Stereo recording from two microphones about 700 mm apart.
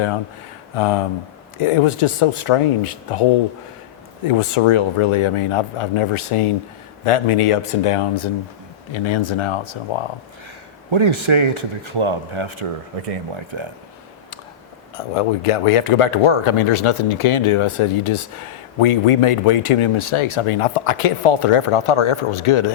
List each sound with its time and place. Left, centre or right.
0.8 s speech: left
4.3 s speech: left
10.9 s speech: right
14.9 s speech: left